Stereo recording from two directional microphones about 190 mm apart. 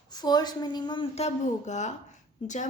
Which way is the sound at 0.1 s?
20° left (ahead or behind).